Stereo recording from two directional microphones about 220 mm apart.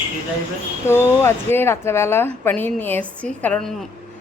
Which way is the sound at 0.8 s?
10° left (ahead or behind).